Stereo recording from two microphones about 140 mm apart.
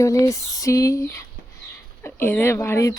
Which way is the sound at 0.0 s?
20° left (ahead or behind).